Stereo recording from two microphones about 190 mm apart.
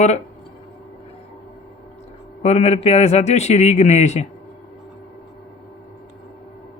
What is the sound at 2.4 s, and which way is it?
A man's voice, 35° left (ahead or behind).